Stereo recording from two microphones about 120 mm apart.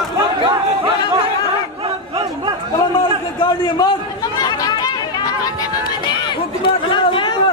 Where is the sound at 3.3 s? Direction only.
40° left (ahead or behind).